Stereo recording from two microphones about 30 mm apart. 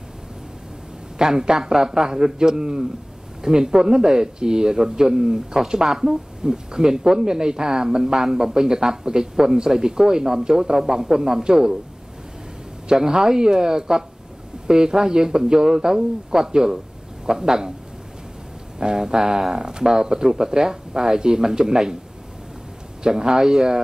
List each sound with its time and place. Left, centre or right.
1.1 s a man's voice: right
12.8 s speech: right
18.8 s speech: right
23.0 s speech: right